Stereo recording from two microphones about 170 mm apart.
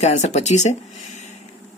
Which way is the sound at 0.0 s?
40° left (ahead or behind).